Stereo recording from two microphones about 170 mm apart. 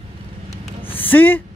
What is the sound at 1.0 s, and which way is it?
Speech, 10° left (ahead or behind).